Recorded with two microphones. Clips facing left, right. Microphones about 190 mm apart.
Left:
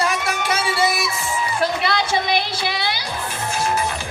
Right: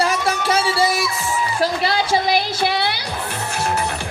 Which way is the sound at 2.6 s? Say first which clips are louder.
Right 4 dB; 55° right (ahead or behind).